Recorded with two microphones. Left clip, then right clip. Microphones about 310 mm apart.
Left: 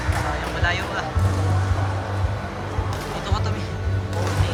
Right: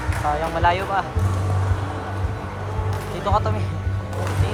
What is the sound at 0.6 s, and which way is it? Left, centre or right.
Speech, centre.